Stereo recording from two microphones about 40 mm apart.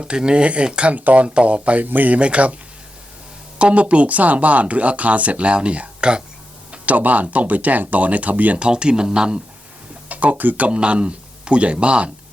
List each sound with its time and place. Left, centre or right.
0.0 s speech: right
0.9 s speech: right
1.8 s speech: right
2.1 s speech: right
3.6 s speech: right
6.7 s speech: right
8.5 s speech: right
10.1 s speech: right
10.7 s speech: right